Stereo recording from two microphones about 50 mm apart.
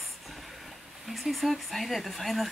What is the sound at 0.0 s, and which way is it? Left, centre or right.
Speech, centre.